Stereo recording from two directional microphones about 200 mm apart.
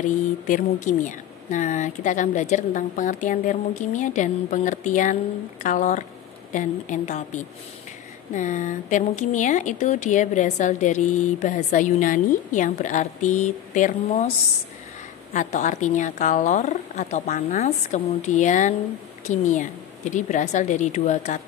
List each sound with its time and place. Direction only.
0.5 s speech: 40° left (ahead or behind)
8.4 s speech: 40° left (ahead or behind)
15.3 s speech: 35° left (ahead or behind)